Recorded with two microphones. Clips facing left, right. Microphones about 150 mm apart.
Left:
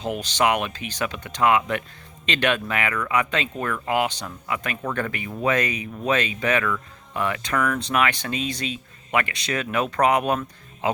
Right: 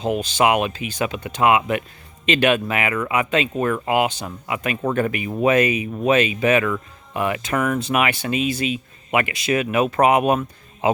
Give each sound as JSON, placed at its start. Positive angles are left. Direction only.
{"t": 0.3, "sound": "speech", "side_deg": -20}